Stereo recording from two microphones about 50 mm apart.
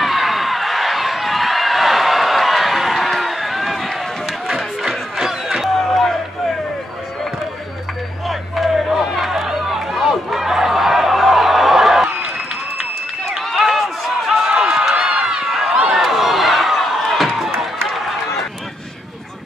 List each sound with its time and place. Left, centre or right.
0.0 s run: centre
8.3 s run: centre
13.4 s run: centre
15.4 s run: centre
15.7 s run: centre
16.0 s a sound: centre